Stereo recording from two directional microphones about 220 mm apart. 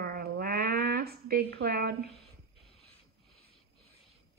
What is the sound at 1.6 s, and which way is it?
Speech, 45° right (ahead or behind).